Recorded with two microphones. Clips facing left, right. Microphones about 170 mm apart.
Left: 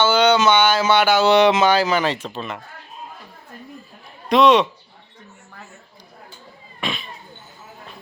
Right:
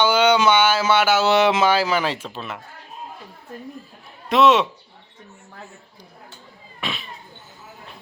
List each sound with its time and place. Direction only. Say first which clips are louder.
0.0 s speech: left 1 dB; 10° right (ahead or behind)
4.3 s a man's voice: left 2 dB; 5° right (ahead or behind)
6.7 s a sound: left 3 dB; 5° right (ahead or behind)